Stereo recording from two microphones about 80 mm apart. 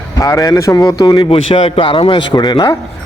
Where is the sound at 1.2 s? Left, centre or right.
Left.